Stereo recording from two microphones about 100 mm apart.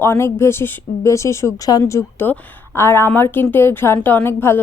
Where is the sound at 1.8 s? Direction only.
25° left (ahead or behind).